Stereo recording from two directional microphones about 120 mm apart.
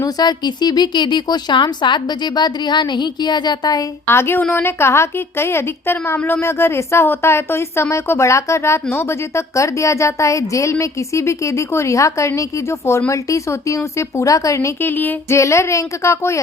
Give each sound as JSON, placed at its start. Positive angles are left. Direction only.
{"t": 0.0, "sound": "speech", "side_deg": 35}
{"t": 4.0, "sound": "a woman's voice", "side_deg": 20}